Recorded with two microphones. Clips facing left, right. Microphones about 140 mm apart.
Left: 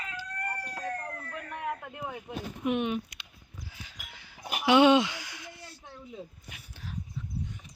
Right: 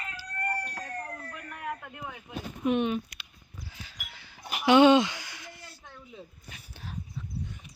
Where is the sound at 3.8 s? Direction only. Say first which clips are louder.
Right 1 dB; 15° left (ahead or behind).